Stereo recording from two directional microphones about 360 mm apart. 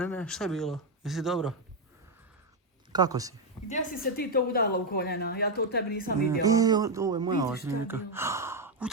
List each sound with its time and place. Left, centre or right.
0.0 s speech: centre
2.9 s speech: centre
3.7 s a woman's voice: left
6.4 s speech: centre